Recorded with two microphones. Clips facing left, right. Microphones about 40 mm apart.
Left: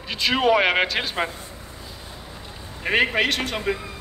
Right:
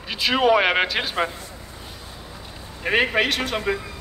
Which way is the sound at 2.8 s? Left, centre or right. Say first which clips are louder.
Even; centre.